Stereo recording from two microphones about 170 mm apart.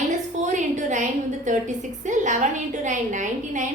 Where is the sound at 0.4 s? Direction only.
45° right (ahead or behind).